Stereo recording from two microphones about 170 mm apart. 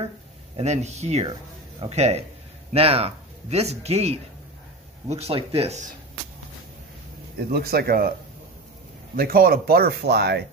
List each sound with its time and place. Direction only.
0.6 s speech: 40° right (ahead or behind)
7.5 s speech: 65° right (ahead or behind)
9.1 s speech: 60° right (ahead or behind); by 10.4 s 80° right